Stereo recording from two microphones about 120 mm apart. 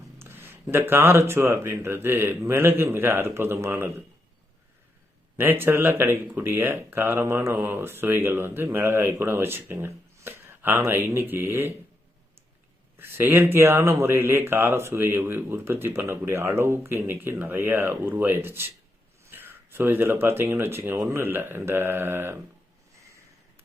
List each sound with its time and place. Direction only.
0.2 s speech: 20° right (ahead or behind)
5.4 s speech: 20° right (ahead or behind)
13.0 s speech: 20° right (ahead or behind)